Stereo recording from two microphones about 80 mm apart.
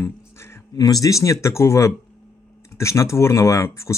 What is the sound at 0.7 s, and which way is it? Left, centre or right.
Speech, left.